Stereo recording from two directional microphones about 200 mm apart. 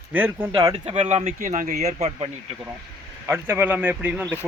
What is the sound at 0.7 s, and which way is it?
Speech, 30° right (ahead or behind).